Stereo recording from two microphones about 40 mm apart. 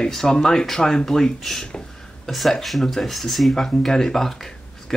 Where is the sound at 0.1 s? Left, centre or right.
Centre.